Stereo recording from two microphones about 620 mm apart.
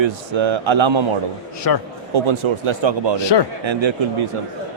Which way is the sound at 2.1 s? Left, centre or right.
Right.